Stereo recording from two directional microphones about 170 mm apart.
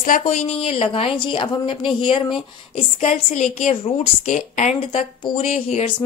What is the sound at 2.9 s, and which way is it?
A woman's voice, 45° left (ahead or behind).